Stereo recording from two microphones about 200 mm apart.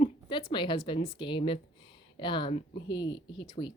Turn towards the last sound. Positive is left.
turn(degrees=25)  # may be behind; listen again after turning